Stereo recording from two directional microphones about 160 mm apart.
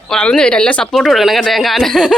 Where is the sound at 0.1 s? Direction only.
5° left (ahead or behind).